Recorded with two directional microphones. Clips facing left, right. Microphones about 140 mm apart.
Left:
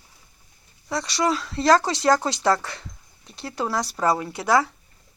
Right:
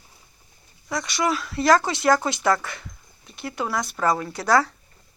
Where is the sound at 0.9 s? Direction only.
30° left (ahead or behind).